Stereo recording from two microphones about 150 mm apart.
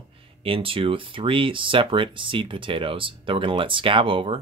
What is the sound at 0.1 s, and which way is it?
Speech, 35° right (ahead or behind).